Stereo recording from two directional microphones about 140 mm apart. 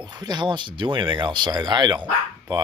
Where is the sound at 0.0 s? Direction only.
30° right (ahead or behind).